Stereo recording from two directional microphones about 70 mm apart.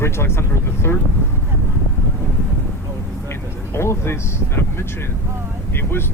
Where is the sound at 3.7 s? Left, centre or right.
Left.